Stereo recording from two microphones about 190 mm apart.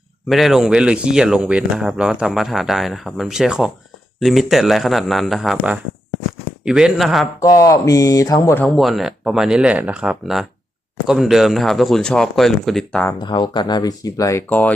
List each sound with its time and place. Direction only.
0.3 s speech: centre (ahead or behind)
7.4 s speech: 15° left (ahead or behind)
13.1 s speech: 25° left (ahead or behind)